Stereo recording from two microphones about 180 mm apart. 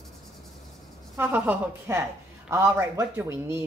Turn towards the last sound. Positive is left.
turn(degrees=-15)  # may be behind; listen again after turning